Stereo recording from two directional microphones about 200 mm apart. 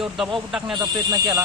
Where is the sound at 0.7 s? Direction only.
15° right (ahead or behind).